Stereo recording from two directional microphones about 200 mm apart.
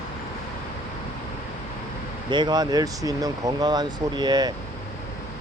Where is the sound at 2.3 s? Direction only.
20° right (ahead or behind).